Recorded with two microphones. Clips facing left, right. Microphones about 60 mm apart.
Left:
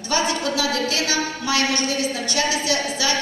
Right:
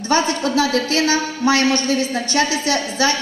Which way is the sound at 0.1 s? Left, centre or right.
Right.